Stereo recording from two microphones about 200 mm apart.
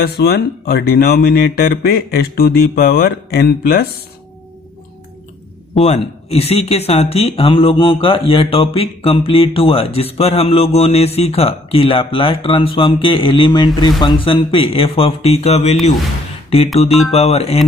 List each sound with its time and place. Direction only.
0.0 s speech: 55° left (ahead or behind)
5.7 s speech: 30° left (ahead or behind)
17.1 s speech: 30° left (ahead or behind)